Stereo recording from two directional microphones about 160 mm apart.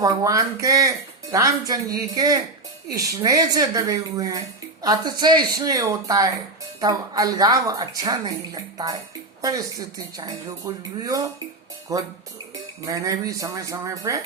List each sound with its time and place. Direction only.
0.0 s speech: 20° right (ahead or behind)